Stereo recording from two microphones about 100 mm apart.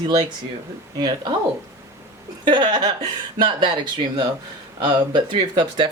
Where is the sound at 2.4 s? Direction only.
50° right (ahead or behind).